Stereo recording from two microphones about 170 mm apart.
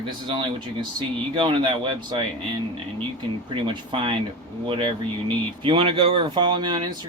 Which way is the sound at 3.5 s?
30° right (ahead or behind).